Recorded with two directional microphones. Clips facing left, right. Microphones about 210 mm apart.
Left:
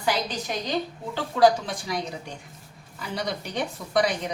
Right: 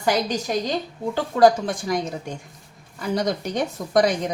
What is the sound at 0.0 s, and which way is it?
A woman's voice, 45° right (ahead or behind).